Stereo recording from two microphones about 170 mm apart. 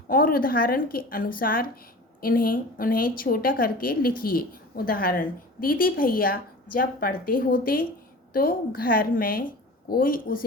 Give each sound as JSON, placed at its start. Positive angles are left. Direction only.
{"t": 0.1, "sound": "a woman's voice", "side_deg": 55}